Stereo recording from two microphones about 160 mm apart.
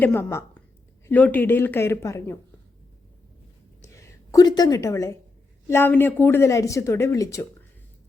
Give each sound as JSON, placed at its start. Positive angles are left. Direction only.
{"t": 0.0, "sound": "speech", "side_deg": 15}
{"t": 3.8, "sound": "a woman's voice", "side_deg": 20}